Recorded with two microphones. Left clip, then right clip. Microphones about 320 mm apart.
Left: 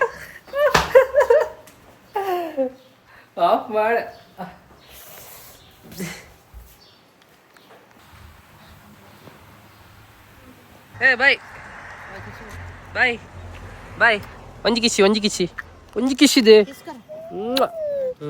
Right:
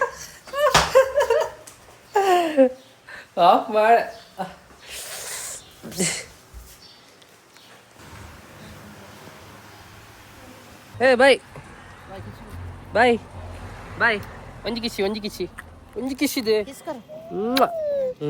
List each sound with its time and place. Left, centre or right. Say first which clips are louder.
0.6 s slap: left 2 dB; centre
2.1 s a sound: right 6 dB; right
3.3 s speech: right 2 dB; centre
11.0 s speech: right 1 dB; centre
12.9 s speech: right 2 dB; centre
14.0 s speech: left 4 dB; centre
14.6 s speech: left 9 dB; left
17.4 s a sound: right 1 dB; centre